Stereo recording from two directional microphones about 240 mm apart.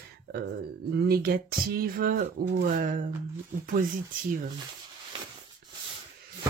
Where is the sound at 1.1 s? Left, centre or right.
Right.